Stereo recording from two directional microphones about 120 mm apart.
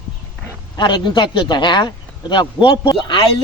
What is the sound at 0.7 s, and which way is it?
A man's voice, 40° left (ahead or behind).